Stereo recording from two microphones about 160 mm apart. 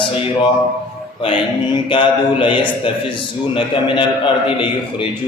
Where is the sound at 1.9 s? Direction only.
30° left (ahead or behind).